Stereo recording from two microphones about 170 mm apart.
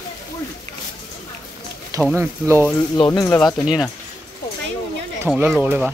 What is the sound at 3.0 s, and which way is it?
Speech, 20° left (ahead or behind).